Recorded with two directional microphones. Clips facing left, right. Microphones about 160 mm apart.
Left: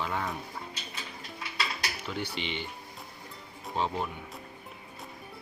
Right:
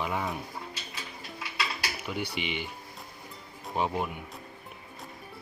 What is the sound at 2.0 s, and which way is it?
Speech, 10° right (ahead or behind).